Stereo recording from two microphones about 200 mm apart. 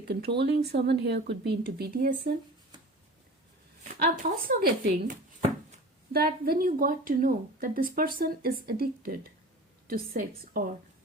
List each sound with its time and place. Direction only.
0.0 s a woman's voice: 55° right (ahead or behind)
3.8 s a sound: 55° right (ahead or behind)
4.2 s a woman's voice: 45° right (ahead or behind)
6.1 s a woman's voice: 50° right (ahead or behind)